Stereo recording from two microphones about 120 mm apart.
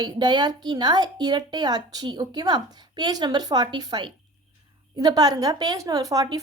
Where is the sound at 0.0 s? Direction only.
35° right (ahead or behind).